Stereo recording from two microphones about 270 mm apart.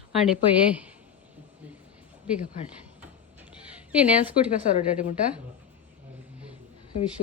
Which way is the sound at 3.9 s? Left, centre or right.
Centre.